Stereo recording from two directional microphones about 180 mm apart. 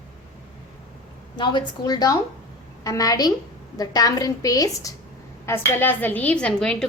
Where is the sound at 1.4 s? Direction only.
25° left (ahead or behind).